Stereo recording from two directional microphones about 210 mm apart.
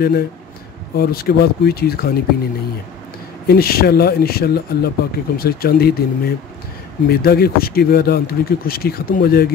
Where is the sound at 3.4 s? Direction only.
45° left (ahead or behind).